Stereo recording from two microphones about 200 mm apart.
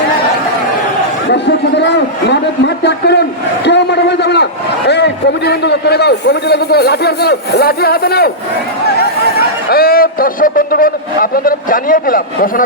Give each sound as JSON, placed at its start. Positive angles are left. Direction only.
{"t": 1.3, "sound": "chatter", "side_deg": 60}
{"t": 2.3, "sound": "a man's voice", "side_deg": 60}
{"t": 9.6, "sound": "a man's voice", "side_deg": 50}